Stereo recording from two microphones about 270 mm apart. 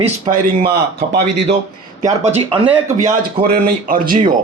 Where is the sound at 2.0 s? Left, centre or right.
Right.